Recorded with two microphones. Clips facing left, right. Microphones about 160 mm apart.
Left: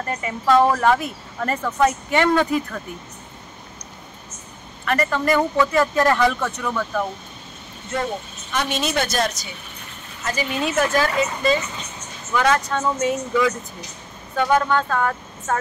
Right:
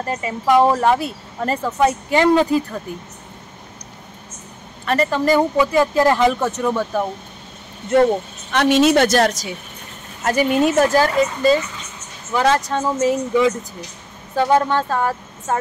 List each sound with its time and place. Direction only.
0.0 s speech: 25° right (ahead or behind)
4.8 s speech: 30° right (ahead or behind)
6.4 s speech: 35° right (ahead or behind)
7.9 s a woman's voice: 65° right (ahead or behind); by 9.5 s 90° right
10.2 s a woman's voice: 55° right (ahead or behind)
10.8 s speech: 35° right (ahead or behind)